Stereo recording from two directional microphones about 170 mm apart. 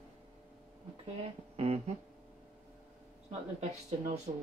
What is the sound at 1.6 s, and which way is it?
Speech, 35° right (ahead or behind).